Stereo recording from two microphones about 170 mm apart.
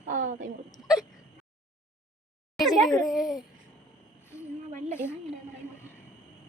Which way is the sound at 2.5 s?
Centre (ahead or behind).